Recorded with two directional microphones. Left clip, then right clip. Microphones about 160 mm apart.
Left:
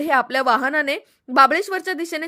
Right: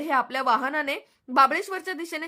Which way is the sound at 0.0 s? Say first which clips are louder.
Left 6 dB; 25° left (ahead or behind).